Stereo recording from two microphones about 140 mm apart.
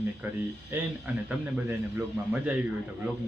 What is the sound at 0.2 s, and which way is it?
A man's voice, 15° right (ahead or behind).